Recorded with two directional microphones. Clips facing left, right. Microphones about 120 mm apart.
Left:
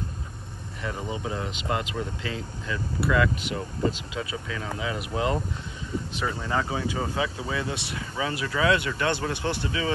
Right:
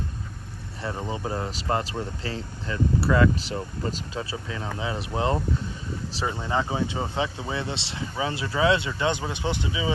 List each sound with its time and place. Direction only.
0.8 s speech: 30° right (ahead or behind); by 9.9 s 15° right (ahead or behind)